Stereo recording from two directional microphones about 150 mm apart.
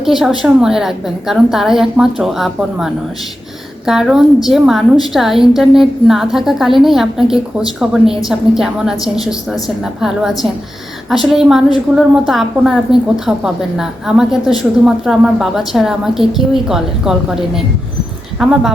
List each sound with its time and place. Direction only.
0.0 s a woman's voice: centre (ahead or behind)